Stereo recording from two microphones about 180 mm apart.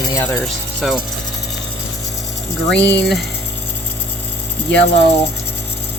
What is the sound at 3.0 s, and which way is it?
Speech, centre (ahead or behind).